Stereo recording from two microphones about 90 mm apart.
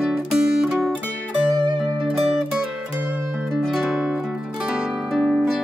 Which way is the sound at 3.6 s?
Centre (ahead or behind).